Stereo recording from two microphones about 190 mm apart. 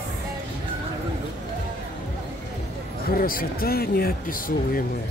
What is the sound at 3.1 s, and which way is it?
Speech, 50° left (ahead or behind).